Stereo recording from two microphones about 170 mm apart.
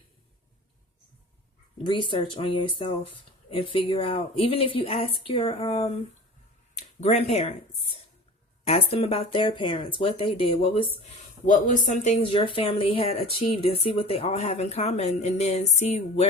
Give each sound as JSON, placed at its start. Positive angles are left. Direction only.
{"t": 1.8, "sound": "speech", "side_deg": 30}
{"t": 8.6, "sound": "speech", "side_deg": 35}
{"t": 11.4, "sound": "speech", "side_deg": 50}